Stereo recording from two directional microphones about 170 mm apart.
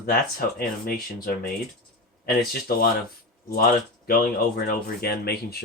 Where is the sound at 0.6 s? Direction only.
60° left (ahead or behind).